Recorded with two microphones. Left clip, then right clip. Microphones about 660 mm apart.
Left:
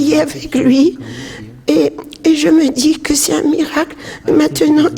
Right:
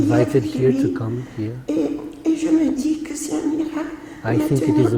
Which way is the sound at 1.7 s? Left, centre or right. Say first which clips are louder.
Left 10 dB; left.